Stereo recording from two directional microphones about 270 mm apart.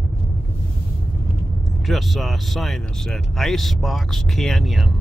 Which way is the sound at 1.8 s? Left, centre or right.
Centre.